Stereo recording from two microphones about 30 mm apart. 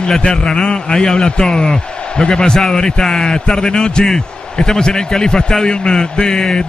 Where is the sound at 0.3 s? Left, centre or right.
Left.